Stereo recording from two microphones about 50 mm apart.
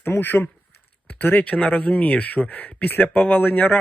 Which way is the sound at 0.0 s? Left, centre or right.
Left.